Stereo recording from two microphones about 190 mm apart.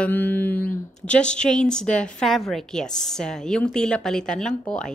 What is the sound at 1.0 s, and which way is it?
A woman's voice, 5° left (ahead or behind).